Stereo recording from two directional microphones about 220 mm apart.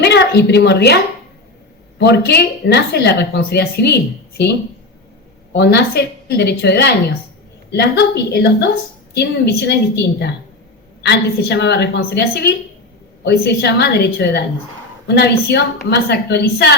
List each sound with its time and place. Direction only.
0.0 s a woman's voice: 50° left (ahead or behind)
2.0 s speech: 50° left (ahead or behind)
5.5 s speech: 45° left (ahead or behind)